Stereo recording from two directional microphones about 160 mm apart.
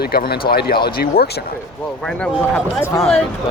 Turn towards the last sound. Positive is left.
turn(degrees=5)  # may be behind; listen again after turning